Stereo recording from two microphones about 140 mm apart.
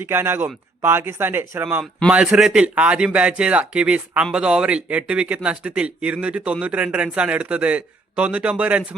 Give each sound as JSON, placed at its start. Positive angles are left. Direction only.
{"t": 0.0, "sound": "speech", "side_deg": -15}